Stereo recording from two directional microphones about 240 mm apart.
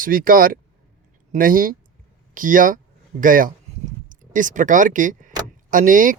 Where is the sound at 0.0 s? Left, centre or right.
Right.